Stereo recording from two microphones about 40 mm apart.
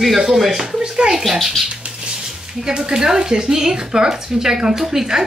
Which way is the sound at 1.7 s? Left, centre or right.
Right.